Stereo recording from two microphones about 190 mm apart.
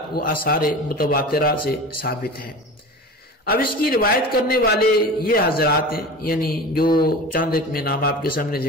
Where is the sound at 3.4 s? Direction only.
50° left (ahead or behind).